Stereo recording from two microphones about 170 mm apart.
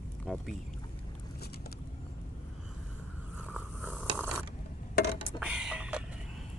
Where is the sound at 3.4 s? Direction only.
10° right (ahead or behind).